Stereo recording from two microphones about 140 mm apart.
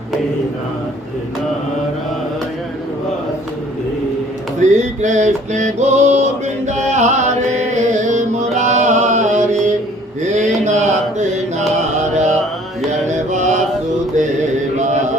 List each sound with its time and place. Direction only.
4.6 s male singing: 60° right (ahead or behind)
6.7 s music: 55° right (ahead or behind)
10.2 s mantra: 60° right (ahead or behind)